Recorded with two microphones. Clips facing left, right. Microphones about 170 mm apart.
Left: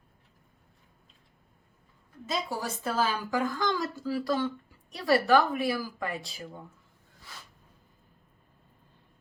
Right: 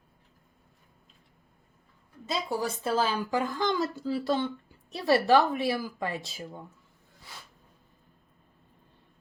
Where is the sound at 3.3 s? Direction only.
20° right (ahead or behind).